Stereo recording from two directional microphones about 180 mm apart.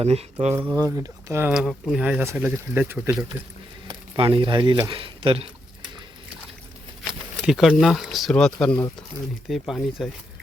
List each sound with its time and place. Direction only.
0.0 s speech: 35° right (ahead or behind)
0.5 s speech: 10° right (ahead or behind)
3.8 s speech: 25° right (ahead or behind)
7.1 s speech: centre (ahead or behind)